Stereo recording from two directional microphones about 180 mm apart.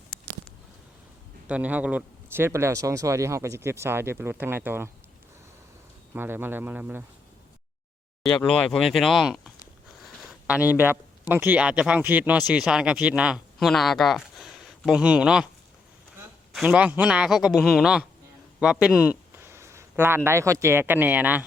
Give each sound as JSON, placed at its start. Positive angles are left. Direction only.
{"t": 1.5, "sound": "speech", "side_deg": -10}
{"t": 6.1, "sound": "speech", "side_deg": -10}
{"t": 8.4, "sound": "a man's voice", "side_deg": 5}
{"t": 16.6, "sound": "a man's voice", "side_deg": -5}